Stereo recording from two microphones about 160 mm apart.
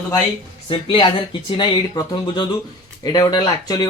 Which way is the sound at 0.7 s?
30° left (ahead or behind).